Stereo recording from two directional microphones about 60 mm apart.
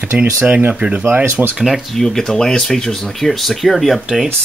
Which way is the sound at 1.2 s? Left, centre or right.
Right.